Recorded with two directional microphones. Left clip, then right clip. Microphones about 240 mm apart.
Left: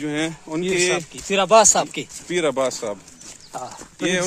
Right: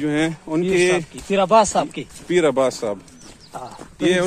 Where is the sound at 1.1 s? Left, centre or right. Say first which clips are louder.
Left 4 dB; left.